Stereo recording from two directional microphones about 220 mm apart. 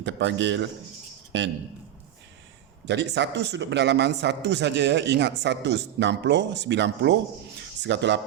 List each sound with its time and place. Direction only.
0.0 s a man's voice: 55° right (ahead or behind)
2.8 s speech: 55° right (ahead or behind)